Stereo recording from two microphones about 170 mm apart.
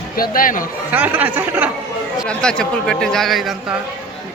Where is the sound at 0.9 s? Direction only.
10° right (ahead or behind).